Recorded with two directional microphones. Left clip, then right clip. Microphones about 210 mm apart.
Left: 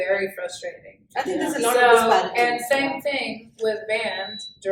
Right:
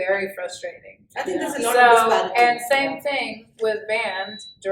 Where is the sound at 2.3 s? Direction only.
20° right (ahead or behind).